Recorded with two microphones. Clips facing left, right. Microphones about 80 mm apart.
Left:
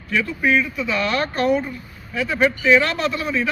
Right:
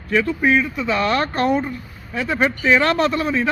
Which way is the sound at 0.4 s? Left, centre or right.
Right.